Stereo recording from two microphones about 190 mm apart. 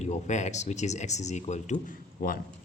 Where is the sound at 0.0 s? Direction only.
40° left (ahead or behind).